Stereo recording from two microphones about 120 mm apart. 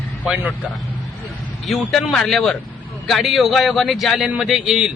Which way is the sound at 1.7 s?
Centre (ahead or behind).